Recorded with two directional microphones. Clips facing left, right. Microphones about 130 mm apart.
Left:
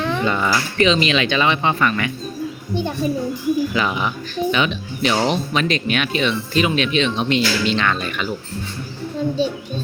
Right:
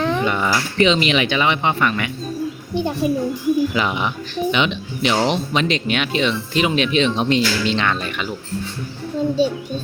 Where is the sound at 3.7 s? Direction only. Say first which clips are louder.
Even; 25° right (ahead or behind).